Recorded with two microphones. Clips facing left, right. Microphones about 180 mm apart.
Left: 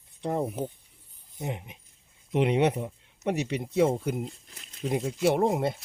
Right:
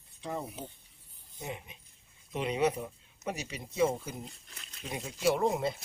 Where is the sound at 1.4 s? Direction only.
60° left (ahead or behind).